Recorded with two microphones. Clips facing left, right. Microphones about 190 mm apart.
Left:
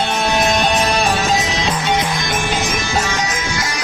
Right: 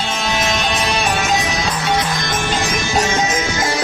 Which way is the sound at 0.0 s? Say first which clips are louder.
Left 3 dB; 60° left (ahead or behind).